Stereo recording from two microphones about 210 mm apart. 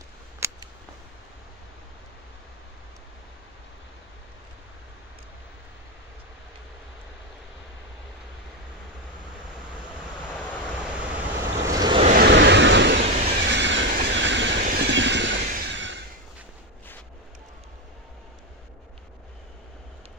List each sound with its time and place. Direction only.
0.4 s a sound: 10° right (ahead or behind)
10.3 s vehicle: 5° left (ahead or behind)
10.8 s vehicle: 5° right (ahead or behind)
11.6 s vehicle: 15° right (ahead or behind)
12.0 s vehicle: 40° right (ahead or behind)
12.3 s vehicle: 55° right (ahead or behind)
13.0 s vehicle: 35° right (ahead or behind)
13.4 s train: 55° right (ahead or behind)
14.6 s vehicle: 45° right (ahead or behind)
15.5 s a sound: 55° right (ahead or behind)